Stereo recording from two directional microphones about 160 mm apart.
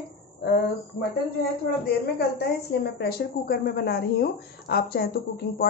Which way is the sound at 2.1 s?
90° left.